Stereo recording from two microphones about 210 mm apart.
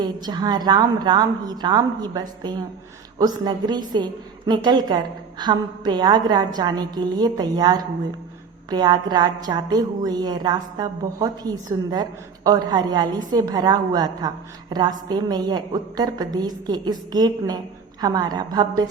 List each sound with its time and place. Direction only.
0.0 s a woman's voice: 20° right (ahead or behind)